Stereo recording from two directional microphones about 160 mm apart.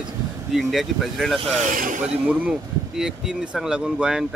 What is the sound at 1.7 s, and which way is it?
Speech, 55° right (ahead or behind).